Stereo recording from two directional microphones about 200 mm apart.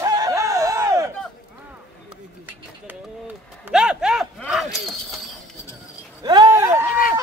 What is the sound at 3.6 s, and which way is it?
Speech, 5° right (ahead or behind).